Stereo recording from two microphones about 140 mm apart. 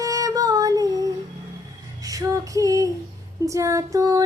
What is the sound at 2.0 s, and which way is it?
Female singing, 25° right (ahead or behind).